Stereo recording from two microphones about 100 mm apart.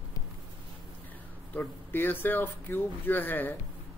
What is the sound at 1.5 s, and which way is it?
Speech, 20° left (ahead or behind).